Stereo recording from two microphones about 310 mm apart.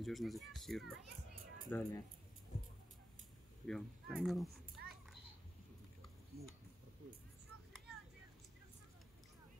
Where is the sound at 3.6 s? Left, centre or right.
Centre.